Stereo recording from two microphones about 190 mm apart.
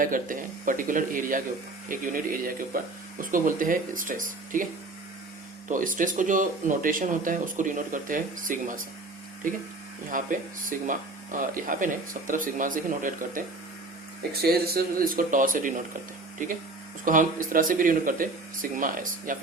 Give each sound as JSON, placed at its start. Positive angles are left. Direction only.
{"t": 0.0, "sound": "speech", "side_deg": -45}
{"t": 5.6, "sound": "speech", "side_deg": -45}
{"t": 14.4, "sound": "speech", "side_deg": -55}